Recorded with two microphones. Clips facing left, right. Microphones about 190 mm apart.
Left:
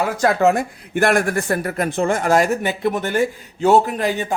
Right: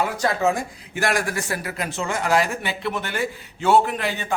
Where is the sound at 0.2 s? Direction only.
60° left (ahead or behind).